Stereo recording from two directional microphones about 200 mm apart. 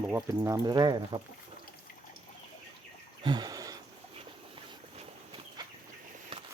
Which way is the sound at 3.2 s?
20° right (ahead or behind).